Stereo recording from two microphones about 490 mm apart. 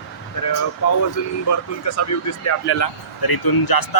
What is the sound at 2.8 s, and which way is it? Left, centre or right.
A man's voice, left.